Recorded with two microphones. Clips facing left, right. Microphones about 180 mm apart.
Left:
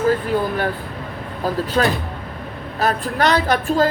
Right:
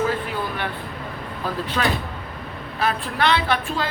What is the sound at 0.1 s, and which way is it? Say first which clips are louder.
Vehicle: left 7 dB; 40° left (ahead or behind).